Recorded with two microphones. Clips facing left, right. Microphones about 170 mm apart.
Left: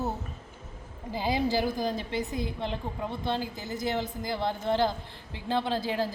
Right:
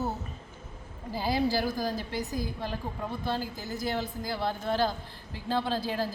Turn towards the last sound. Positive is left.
turn(degrees=15)  # may be behind; listen again after turning